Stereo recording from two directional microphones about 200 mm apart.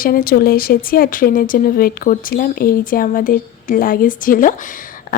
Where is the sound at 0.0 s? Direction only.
45° left (ahead or behind).